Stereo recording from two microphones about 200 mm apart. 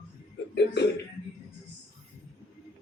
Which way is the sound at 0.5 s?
55° left (ahead or behind).